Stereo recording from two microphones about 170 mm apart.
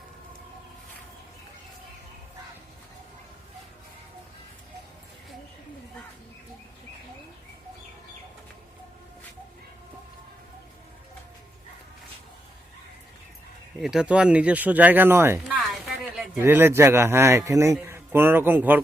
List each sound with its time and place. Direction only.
13.7 s a man's voice: 5° right (ahead or behind)
15.4 s a sound: centre (ahead or behind)
16.4 s a man's voice: 15° right (ahead or behind)